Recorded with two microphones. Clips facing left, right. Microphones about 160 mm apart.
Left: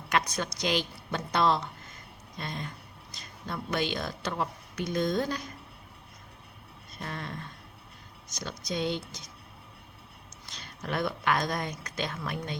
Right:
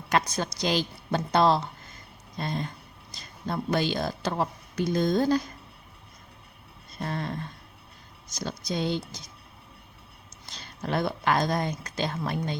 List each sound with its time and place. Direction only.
0.1 s speech: 30° right (ahead or behind)
7.0 s speech: 35° right (ahead or behind)
8.4 s speech: 35° right (ahead or behind)
10.4 s speech: 30° right (ahead or behind)